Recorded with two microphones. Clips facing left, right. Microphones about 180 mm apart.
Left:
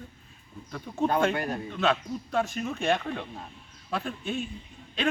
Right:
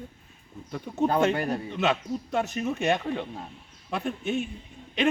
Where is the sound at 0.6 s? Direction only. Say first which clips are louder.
Right 2 dB; 15° right (ahead or behind).